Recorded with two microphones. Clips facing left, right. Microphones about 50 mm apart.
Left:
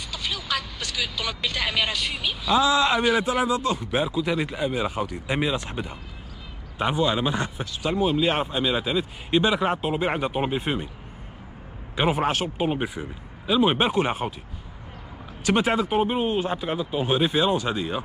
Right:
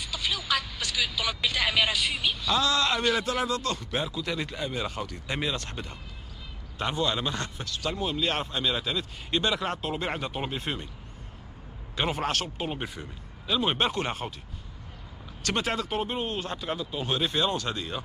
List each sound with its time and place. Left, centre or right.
0.0 s speech: centre
2.5 s speech: centre
11.9 s speech: centre
15.4 s speech: centre